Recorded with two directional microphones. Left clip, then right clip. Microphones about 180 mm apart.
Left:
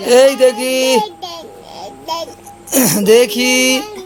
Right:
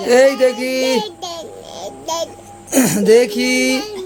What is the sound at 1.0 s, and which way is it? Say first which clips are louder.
Child singing: left 1 dB; 20° right (ahead or behind).